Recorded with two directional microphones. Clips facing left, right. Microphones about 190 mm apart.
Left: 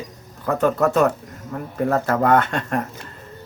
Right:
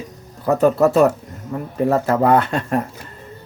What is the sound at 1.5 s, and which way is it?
Speech, 10° right (ahead or behind).